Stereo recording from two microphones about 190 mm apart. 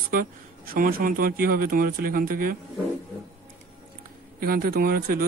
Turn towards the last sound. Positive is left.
turn(degrees=-50)  # may be behind; listen again after turning